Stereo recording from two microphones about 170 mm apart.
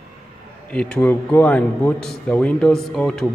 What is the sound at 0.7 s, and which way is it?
A man's voice, 5° left (ahead or behind).